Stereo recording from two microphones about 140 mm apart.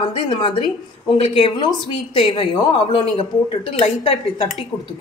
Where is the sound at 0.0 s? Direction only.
40° left (ahead or behind).